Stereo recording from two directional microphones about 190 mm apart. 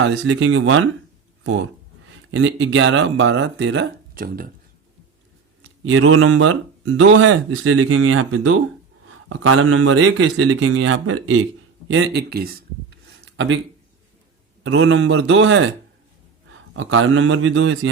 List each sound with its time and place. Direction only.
0.0 s speech: 70° right (ahead or behind); by 0.9 s 90° right
2.3 s speech: 75° right (ahead or behind)
4.1 s speech: 50° right (ahead or behind)
5.8 s speech: 90° right
11.9 s a sound: 65° right (ahead or behind)
14.6 s a man's voice: 85° right